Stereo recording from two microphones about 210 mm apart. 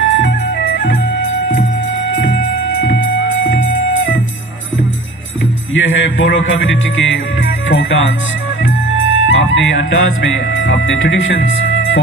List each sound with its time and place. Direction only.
0.1 s music: 65° left (ahead or behind)
5.8 s music: 65° left (ahead or behind)
8.9 s speech: 65° left (ahead or behind)